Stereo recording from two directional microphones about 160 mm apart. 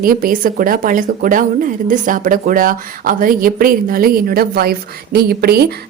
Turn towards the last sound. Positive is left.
turn(degrees=-75)  # may be behind; listen again after turning